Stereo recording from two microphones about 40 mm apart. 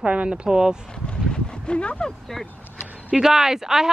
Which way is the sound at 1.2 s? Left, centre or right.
Left.